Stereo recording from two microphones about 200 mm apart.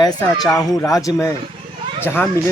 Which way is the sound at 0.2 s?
Centre (ahead or behind).